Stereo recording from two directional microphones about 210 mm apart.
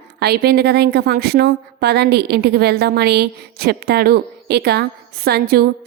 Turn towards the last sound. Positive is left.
turn(degrees=-45)  # may be behind; listen again after turning